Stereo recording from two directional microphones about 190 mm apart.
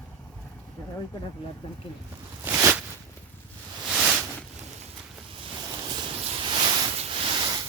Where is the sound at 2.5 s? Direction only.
10° right (ahead or behind).